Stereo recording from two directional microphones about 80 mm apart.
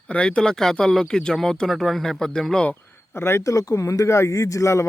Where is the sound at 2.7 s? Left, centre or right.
Left.